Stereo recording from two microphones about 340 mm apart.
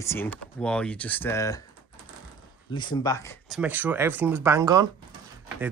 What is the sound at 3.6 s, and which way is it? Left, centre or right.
Speech, centre.